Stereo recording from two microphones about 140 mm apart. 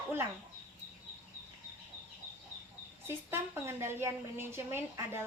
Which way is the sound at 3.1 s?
15° right (ahead or behind).